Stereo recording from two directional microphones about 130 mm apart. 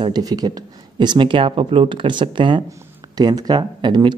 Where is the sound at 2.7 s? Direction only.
30° right (ahead or behind).